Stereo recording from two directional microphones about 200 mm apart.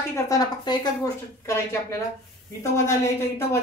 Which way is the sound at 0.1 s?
15° left (ahead or behind).